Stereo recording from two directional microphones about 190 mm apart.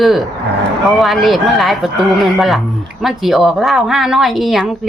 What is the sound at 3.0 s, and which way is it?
Speech, centre (ahead or behind).